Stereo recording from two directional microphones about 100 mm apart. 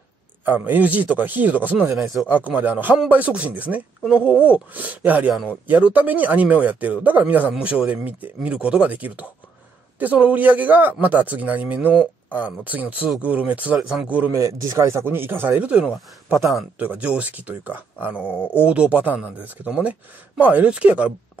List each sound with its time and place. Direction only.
0.5 s speech: 20° right (ahead or behind)
1.9 s speech: centre (ahead or behind)
2.2 s speech: 15° right (ahead or behind)
13.7 s speech: centre (ahead or behind)
14.0 s speech: 15° right (ahead or behind)
14.3 s speech: 25° right (ahead or behind); by 16.6 s centre (ahead or behind)
16.7 s speech: 15° right (ahead or behind)
18.2 s speech: 20° left (ahead or behind)
18.6 s speech: 15° right (ahead or behind)